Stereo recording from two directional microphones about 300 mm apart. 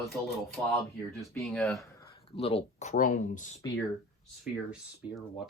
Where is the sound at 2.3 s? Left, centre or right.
Centre.